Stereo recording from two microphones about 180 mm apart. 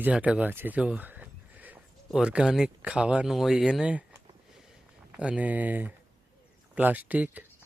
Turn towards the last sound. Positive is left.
turn(degrees=-10)  # may be behind; listen again after turning